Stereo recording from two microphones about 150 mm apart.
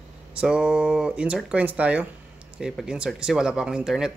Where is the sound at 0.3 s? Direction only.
5° right (ahead or behind).